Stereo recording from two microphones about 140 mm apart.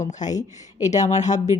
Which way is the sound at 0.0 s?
60° left (ahead or behind).